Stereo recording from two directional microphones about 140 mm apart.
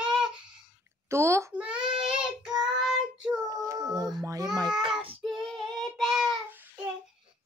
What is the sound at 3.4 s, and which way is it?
Child singing, 25° right (ahead or behind).